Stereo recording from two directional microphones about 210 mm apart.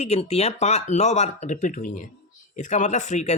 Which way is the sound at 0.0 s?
30° left (ahead or behind).